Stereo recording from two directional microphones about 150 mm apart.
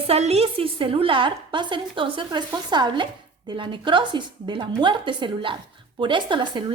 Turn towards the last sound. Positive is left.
turn(degrees=-30)  # may be behind; listen again after turning